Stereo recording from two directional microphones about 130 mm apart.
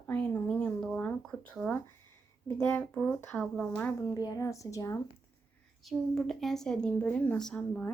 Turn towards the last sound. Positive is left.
turn(degrees=10)  # may be behind; listen again after turning